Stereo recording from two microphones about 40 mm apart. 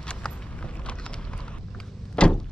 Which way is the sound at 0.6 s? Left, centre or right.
Left.